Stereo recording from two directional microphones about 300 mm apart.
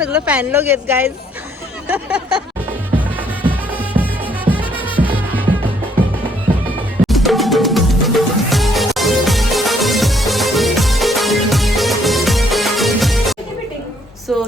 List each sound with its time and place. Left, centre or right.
0.0 s speech: centre
1.9 s a sound: centre
3.5 s music: centre
4.6 s music: centre
7.1 s music: centre